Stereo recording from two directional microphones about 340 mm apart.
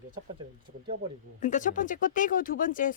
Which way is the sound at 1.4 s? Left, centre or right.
Left.